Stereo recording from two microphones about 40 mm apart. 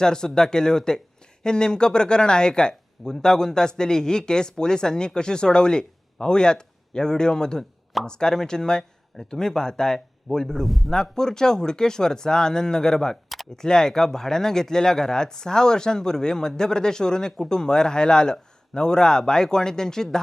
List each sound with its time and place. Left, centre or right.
0.0 s speech: centre
10.7 s a man's voice: centre
10.9 s speech: centre